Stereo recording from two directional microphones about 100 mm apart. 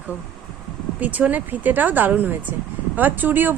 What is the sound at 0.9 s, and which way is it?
Speech, 15° right (ahead or behind).